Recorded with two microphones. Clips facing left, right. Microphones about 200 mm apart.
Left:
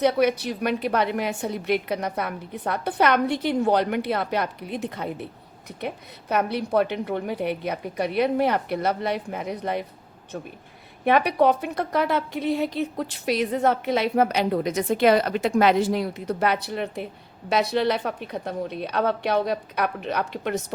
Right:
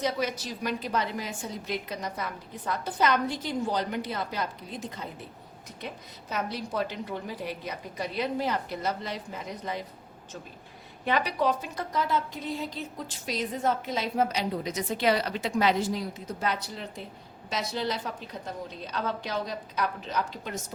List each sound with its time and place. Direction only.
0.0 s a woman's voice: 65° left (ahead or behind)